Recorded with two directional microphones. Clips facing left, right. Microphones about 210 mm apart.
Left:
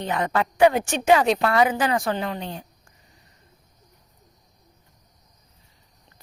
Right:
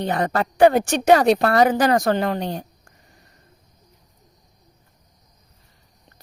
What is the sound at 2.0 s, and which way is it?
Speech, 65° right (ahead or behind).